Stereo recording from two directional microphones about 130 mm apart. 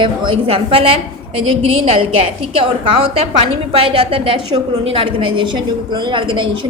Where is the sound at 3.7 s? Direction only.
45° right (ahead or behind).